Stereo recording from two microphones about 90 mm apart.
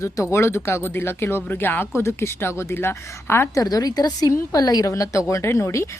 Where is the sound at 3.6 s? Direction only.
45° left (ahead or behind).